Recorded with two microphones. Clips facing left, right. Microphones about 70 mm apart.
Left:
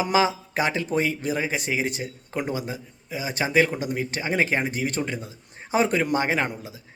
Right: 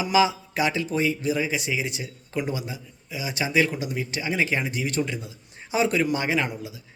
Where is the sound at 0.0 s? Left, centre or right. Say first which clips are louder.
Even; left.